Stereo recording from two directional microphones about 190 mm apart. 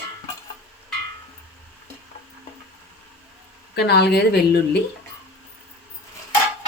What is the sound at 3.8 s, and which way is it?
A woman's voice, 60° left (ahead or behind).